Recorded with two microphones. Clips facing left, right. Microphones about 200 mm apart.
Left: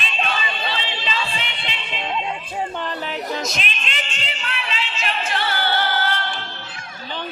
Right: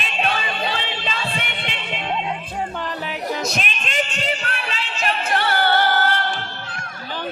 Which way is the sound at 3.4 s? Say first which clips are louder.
Right 2 dB; 45° right (ahead or behind).